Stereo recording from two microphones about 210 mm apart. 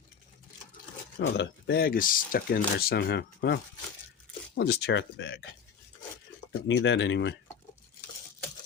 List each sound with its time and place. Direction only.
1.2 s speech: 55° left (ahead or behind)
6.7 s speech: 60° left (ahead or behind)